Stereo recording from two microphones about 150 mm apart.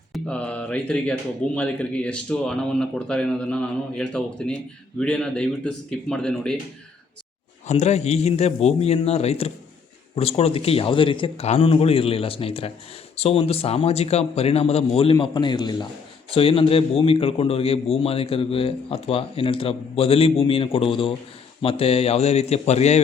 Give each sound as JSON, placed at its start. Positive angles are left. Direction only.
{"t": 0.1, "sound": "speech", "side_deg": 5}
{"t": 7.7, "sound": "a man's voice", "side_deg": 45}
{"t": 15.1, "sound": "a man's voice", "side_deg": 30}